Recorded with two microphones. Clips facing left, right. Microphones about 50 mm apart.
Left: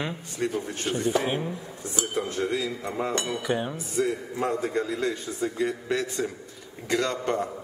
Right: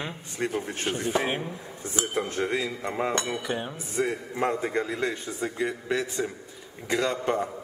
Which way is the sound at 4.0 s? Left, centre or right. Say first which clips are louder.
Even; right.